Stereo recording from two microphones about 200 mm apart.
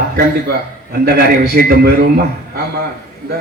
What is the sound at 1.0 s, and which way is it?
A man's voice, 50° right (ahead or behind).